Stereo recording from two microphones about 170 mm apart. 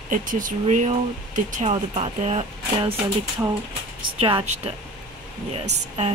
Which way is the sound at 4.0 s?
30° right (ahead or behind).